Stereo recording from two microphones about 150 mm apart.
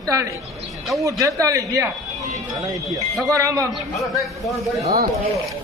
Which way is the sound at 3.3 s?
20° right (ahead or behind).